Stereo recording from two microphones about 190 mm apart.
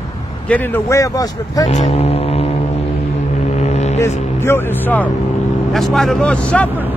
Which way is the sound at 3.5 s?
35° left (ahead or behind).